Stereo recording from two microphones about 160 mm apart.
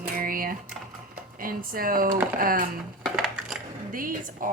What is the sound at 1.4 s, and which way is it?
Speech, 65° right (ahead or behind).